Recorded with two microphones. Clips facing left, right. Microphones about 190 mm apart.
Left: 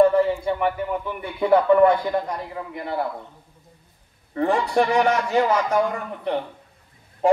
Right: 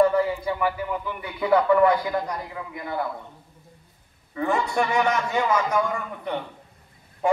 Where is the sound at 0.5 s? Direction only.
25° left (ahead or behind).